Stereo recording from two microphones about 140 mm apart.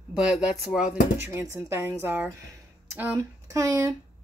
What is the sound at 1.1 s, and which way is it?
Speech, 15° right (ahead or behind).